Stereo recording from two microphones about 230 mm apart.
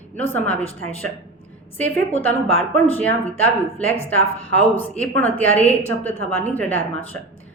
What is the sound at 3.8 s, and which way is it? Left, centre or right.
Speech, centre.